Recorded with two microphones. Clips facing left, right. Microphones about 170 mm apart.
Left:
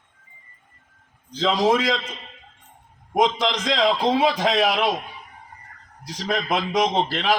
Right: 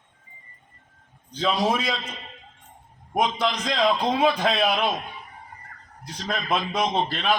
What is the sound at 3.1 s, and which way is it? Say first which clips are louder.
A man's voice: left 3 dB; 90° left.